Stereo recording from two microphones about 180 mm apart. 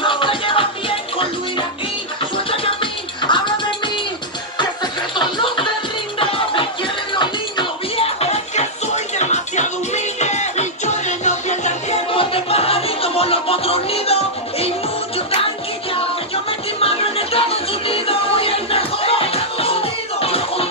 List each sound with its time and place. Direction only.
0.0 s music: 30° left (ahead or behind)
2.3 s music: 30° left (ahead or behind)
5.1 s music: 25° left (ahead or behind)
16.4 s music: 30° left (ahead or behind)